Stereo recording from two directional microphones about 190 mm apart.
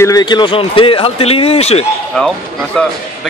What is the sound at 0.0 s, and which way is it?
Speech, 20° left (ahead or behind).